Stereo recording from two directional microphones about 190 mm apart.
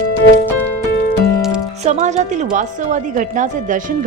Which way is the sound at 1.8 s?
40° right (ahead or behind).